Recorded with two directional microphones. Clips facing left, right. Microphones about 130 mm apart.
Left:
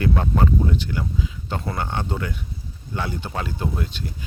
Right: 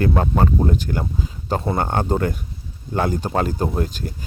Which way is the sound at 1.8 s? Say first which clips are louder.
Right 7 dB; 45° right (ahead or behind).